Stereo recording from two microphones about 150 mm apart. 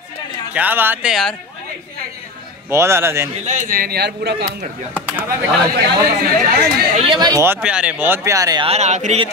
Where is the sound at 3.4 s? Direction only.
65° right (ahead or behind); by 4.7 s 90° right.